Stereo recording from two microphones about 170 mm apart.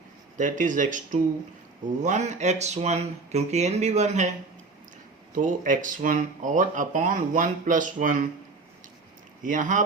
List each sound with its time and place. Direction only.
0.3 s speech: 50° right (ahead or behind)
5.3 s speech: 50° right (ahead or behind)
9.4 s speech: 50° right (ahead or behind)